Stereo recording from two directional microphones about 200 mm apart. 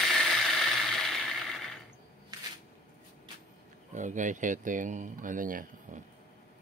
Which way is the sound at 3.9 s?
40° right (ahead or behind).